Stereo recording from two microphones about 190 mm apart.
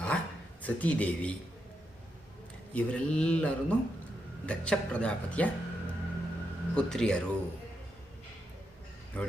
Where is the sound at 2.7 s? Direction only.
5° left (ahead or behind).